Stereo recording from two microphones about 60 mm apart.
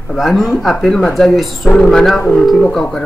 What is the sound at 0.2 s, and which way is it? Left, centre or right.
Speech, centre.